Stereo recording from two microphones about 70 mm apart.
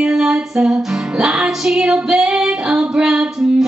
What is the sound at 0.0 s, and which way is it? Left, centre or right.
Music, centre.